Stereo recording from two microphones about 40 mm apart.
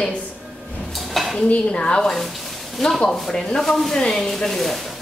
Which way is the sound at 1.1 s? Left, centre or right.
Centre.